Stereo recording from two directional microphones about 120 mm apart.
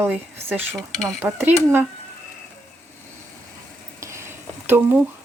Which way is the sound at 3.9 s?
25° right (ahead or behind).